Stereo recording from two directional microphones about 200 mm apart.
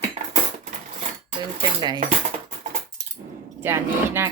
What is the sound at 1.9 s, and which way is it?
Cutlery, 40° right (ahead or behind).